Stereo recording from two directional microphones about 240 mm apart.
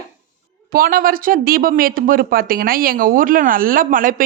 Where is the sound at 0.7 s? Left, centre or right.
Right.